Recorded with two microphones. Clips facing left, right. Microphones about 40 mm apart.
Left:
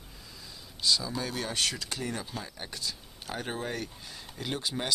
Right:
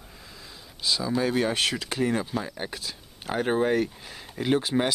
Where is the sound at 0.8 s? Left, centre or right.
Centre.